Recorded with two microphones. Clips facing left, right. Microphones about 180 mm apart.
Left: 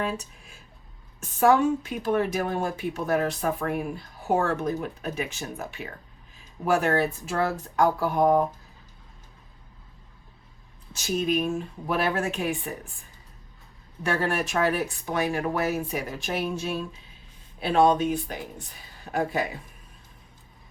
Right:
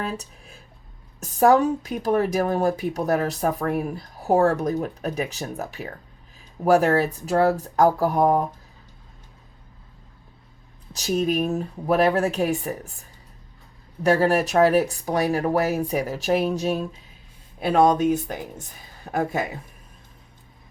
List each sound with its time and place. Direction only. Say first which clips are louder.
0.0 s speech: even; 35° right (ahead or behind)
10.9 s speech: right 3 dB; 40° right (ahead or behind)
14.0 s speech: right 7 dB; 35° right (ahead or behind)